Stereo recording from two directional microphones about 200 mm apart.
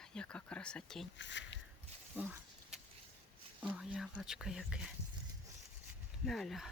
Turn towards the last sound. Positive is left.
turn(degrees=0)  # may be behind; listen again after turning